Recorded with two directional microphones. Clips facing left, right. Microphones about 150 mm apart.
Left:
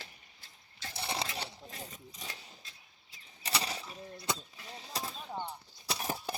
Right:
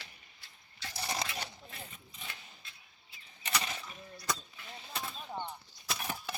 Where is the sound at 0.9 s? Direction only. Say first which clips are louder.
Even; 25° left (ahead or behind).